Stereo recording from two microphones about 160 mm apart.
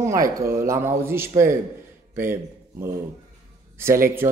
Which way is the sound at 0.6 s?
15° right (ahead or behind).